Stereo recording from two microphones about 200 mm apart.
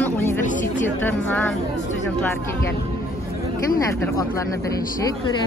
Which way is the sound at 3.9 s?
15° left (ahead or behind).